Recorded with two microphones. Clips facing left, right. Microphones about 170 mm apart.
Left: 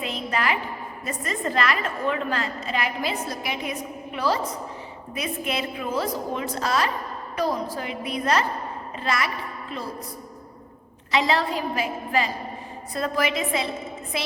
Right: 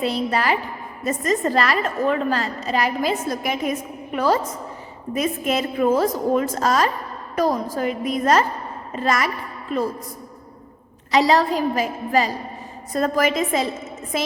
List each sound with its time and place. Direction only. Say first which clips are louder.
0.0 s a woman's voice: right 5 dB; 35° right (ahead or behind)
11.1 s a woman's voice: right 6 dB; 40° right (ahead or behind)